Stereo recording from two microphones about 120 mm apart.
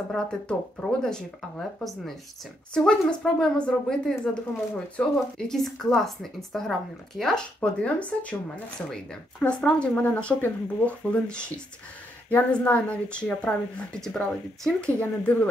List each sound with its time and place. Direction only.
0.1 s speech: 5° left (ahead or behind)
2.7 s a woman's voice: 5° left (ahead or behind)